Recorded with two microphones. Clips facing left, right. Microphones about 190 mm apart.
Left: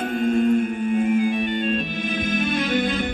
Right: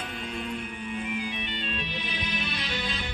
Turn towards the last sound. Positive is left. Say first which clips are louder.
# left 12 dB
turn(degrees=50)  # may be behind; listen again after turning